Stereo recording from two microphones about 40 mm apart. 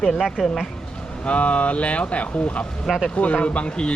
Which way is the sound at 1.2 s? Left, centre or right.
Left.